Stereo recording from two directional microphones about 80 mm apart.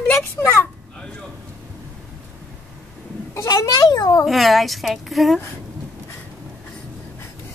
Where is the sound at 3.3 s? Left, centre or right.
Left.